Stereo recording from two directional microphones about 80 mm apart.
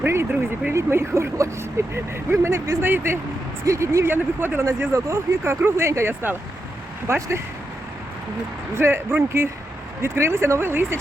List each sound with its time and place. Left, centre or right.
0.0 s vehicle: right
0.7 s speech: right
4.6 s speech: right
8.7 s speech: right